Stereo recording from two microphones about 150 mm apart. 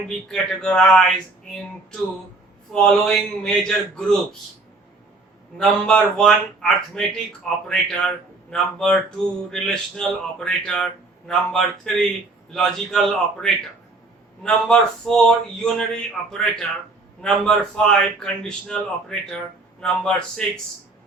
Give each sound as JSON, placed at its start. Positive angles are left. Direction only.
{"t": 0.3, "sound": "speech", "side_deg": 5}
{"t": 2.7, "sound": "speech", "side_deg": 5}
{"t": 5.5, "sound": "speech", "side_deg": 5}